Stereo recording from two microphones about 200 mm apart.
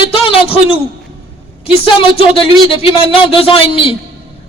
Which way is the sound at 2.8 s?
30° left (ahead or behind).